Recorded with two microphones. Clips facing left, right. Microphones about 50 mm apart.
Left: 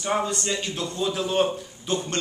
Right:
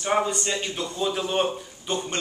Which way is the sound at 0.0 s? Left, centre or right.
Centre.